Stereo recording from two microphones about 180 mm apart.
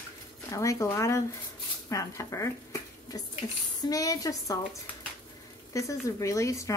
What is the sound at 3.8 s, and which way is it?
A woman's voice, 20° left (ahead or behind).